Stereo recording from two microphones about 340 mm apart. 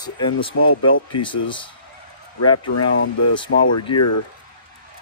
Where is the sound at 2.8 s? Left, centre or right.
Left.